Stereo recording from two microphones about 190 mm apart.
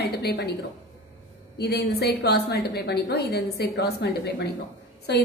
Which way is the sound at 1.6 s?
55° left (ahead or behind).